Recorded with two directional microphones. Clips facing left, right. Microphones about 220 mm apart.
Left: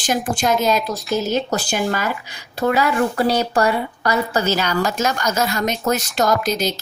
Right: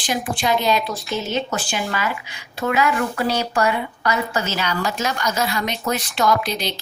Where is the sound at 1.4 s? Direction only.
40° left (ahead or behind).